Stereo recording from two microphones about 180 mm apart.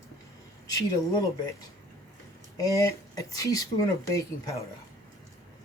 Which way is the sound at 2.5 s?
15° left (ahead or behind).